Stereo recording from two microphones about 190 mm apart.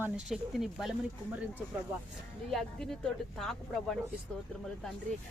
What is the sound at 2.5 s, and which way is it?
Speech, centre (ahead or behind).